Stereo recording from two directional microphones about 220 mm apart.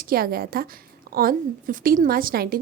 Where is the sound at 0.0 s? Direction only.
40° right (ahead or behind).